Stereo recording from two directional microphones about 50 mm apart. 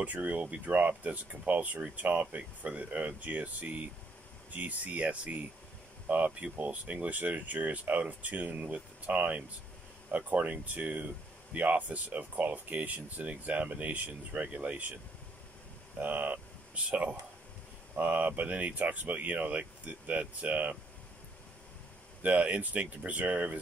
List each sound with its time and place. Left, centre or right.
0.0 s speech: right
16.0 s speech: right
16.8 s speech: right
22.2 s speech: right